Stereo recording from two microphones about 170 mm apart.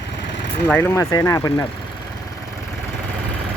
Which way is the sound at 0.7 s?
15° left (ahead or behind).